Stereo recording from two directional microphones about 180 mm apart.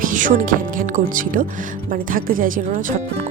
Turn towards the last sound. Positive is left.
turn(degrees=-40)  # may be behind; listen again after turning